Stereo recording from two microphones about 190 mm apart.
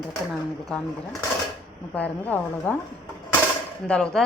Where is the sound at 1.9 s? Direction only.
10° left (ahead or behind).